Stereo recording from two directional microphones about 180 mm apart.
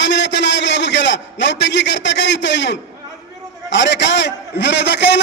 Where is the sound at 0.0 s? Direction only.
75° left (ahead or behind).